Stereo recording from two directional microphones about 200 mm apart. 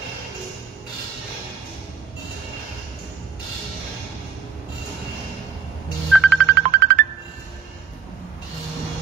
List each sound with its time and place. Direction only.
6.1 s music: centre (ahead or behind)
6.5 s music: 55° right (ahead or behind)